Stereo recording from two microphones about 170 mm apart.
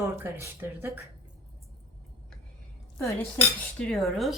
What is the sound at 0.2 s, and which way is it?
Speech, 15° right (ahead or behind).